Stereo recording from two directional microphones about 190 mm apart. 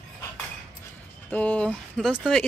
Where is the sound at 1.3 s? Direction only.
5° left (ahead or behind).